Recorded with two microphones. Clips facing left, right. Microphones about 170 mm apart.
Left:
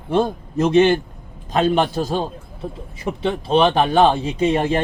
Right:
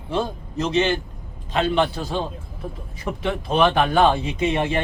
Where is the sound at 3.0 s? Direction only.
30° left (ahead or behind).